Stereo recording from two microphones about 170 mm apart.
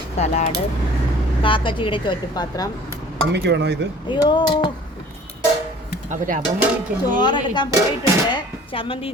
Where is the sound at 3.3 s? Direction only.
85° right.